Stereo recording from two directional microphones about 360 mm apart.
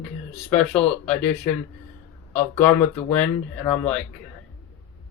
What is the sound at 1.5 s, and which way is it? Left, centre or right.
Speech, centre.